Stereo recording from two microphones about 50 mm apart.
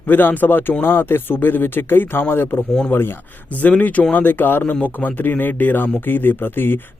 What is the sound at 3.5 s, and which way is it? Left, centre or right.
Speech, left.